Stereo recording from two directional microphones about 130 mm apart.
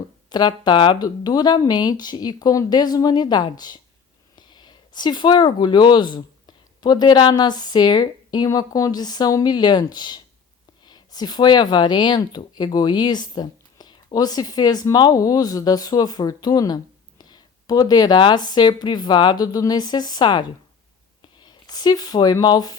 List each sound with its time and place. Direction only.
0.3 s speech: 30° left (ahead or behind)
21.4 s speech: 30° left (ahead or behind)